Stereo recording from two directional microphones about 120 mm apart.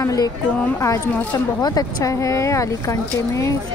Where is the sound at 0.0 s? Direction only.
30° left (ahead or behind).